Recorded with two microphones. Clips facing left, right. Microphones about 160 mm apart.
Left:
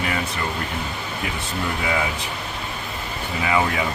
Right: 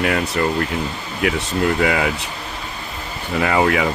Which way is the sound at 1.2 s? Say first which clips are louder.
Right 12 dB; 85° right.